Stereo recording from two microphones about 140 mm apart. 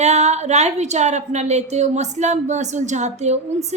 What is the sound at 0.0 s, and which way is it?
A woman's voice, 50° right (ahead or behind).